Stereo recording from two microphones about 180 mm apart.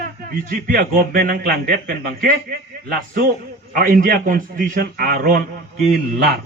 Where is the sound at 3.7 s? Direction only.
50° right (ahead or behind).